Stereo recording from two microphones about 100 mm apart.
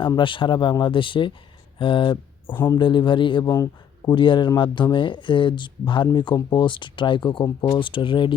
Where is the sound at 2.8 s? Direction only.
55° left (ahead or behind).